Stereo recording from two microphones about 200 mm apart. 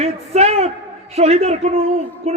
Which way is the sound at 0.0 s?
30° right (ahead or behind).